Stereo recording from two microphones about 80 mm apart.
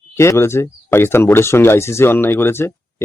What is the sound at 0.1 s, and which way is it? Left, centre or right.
A man's voice, left.